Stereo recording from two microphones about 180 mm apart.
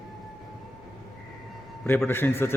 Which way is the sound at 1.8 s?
10° left (ahead or behind).